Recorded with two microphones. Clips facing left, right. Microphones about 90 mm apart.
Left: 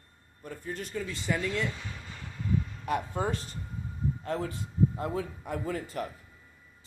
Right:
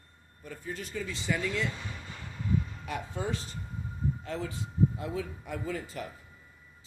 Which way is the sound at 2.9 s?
50° left (ahead or behind).